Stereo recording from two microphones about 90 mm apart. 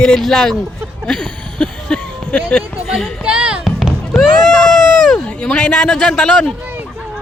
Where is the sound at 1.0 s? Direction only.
10° left (ahead or behind).